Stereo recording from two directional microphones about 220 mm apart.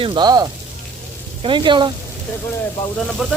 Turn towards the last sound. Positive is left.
turn(degrees=0)  # may be behind; listen again after turning